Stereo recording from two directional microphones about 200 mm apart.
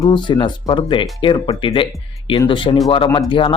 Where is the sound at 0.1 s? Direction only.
25° left (ahead or behind).